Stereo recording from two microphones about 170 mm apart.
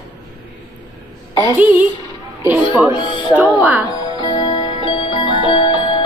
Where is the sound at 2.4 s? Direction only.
10° right (ahead or behind).